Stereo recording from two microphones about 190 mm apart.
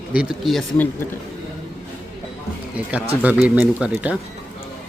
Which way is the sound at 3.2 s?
10° right (ahead or behind).